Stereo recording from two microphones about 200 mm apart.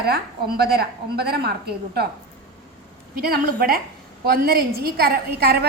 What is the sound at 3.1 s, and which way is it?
A woman's voice, 50° right (ahead or behind).